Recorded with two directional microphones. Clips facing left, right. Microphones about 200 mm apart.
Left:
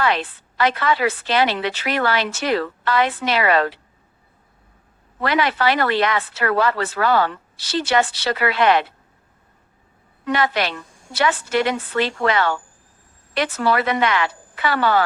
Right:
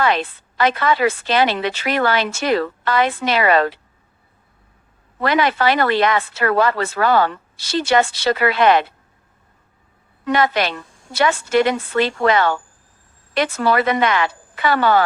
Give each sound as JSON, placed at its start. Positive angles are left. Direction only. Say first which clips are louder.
{"t": 0.0, "sound": "a woman's voice", "louder": "right 2 dB", "side_deg": -45}
{"t": 5.2, "sound": "a woman's voice", "louder": "right 2 dB", "side_deg": -45}
{"t": 10.2, "sound": "a woman's voice", "louder": "right 3 dB", "side_deg": -45}